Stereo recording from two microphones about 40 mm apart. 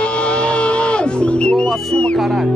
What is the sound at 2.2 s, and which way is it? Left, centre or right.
Music, centre.